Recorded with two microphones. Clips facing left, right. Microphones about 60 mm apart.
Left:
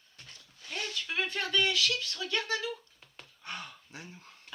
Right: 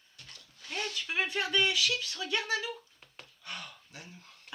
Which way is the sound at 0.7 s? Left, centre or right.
Centre.